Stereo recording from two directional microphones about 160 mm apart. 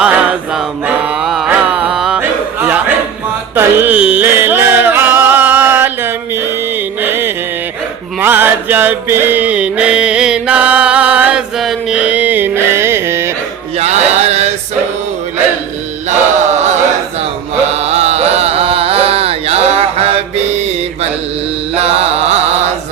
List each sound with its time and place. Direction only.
0.0 s music: 5° right (ahead or behind)
13.7 s a sound: 40° right (ahead or behind)
16.0 s chant: 45° right (ahead or behind)
17.7 s carnatic music: 40° right (ahead or behind)
21.8 s mantra: 40° right (ahead or behind)